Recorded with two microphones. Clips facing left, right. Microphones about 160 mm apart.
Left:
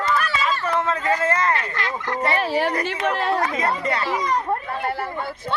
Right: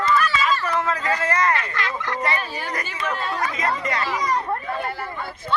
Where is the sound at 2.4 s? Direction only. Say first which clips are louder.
Left 8 dB; 75° left (ahead or behind).